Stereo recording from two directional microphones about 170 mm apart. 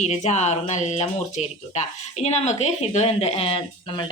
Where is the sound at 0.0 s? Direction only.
40° left (ahead or behind).